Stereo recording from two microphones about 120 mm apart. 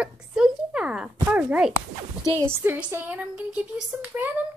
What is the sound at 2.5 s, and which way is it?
Speech, 15° right (ahead or behind).